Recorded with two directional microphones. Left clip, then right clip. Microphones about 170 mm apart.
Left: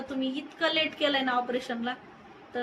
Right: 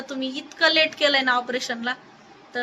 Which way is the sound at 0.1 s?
15° right (ahead or behind).